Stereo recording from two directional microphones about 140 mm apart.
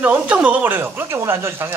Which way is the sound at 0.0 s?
10° right (ahead or behind).